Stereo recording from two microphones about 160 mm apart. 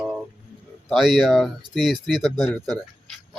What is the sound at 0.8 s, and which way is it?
Speech, centre (ahead or behind).